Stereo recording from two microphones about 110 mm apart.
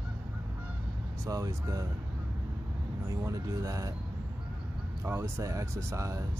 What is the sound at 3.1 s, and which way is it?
Speech, 30° right (ahead or behind).